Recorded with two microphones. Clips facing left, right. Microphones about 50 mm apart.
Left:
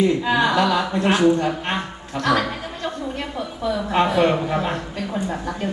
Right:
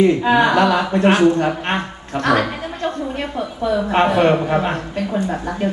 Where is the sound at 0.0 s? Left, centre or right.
Right; by 5.6 s centre.